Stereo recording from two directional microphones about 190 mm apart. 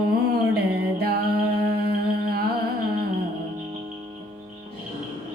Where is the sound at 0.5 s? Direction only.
55° right (ahead or behind).